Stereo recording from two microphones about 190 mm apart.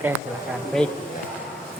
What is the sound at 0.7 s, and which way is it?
Speech, 5° left (ahead or behind).